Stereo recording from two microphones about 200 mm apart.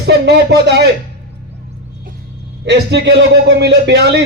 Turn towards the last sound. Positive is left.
turn(degrees=-60)  # may be behind; listen again after turning